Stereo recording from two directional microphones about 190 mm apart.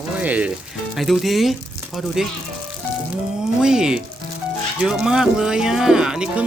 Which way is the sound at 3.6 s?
5° right (ahead or behind).